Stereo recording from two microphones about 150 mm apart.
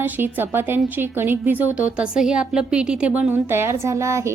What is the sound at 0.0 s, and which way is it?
A woman's voice, 15° right (ahead or behind).